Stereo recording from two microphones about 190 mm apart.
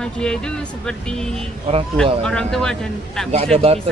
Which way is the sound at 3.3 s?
30° right (ahead or behind).